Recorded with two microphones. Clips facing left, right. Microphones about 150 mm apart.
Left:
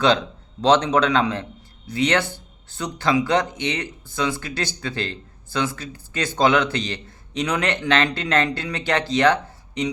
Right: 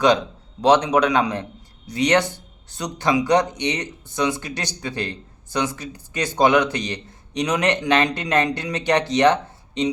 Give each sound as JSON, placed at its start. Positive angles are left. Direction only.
{"t": 0.6, "sound": "speech", "side_deg": -15}